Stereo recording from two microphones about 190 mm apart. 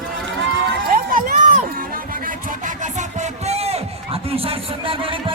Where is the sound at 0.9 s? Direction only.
45° right (ahead or behind).